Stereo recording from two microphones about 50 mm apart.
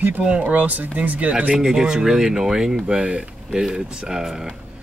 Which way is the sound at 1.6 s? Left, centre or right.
Centre.